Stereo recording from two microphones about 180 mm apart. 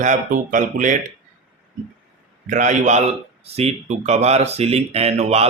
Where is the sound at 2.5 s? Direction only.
45° right (ahead or behind).